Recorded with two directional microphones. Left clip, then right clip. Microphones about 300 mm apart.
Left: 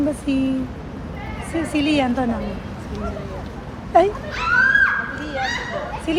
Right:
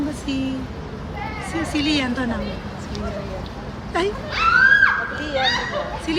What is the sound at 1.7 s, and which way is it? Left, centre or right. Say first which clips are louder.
Speech: left 3 dB; centre.